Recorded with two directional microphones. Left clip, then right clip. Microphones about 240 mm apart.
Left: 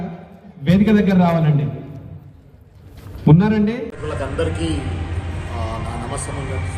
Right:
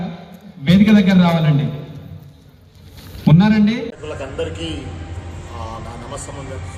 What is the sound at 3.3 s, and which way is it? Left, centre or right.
Speech, left.